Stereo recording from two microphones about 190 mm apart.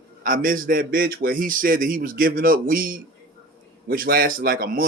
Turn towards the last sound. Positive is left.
turn(degrees=-50)  # may be behind; listen again after turning